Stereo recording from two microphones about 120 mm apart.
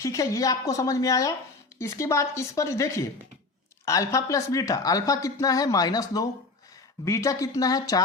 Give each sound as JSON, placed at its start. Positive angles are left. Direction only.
{"t": 0.0, "sound": "speech", "side_deg": 25}